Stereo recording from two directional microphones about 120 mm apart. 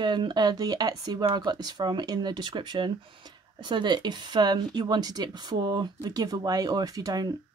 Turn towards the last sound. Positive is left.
turn(degrees=-30)  # may be behind; listen again after turning